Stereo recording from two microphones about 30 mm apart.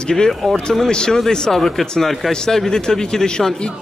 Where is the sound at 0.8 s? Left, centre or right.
Left.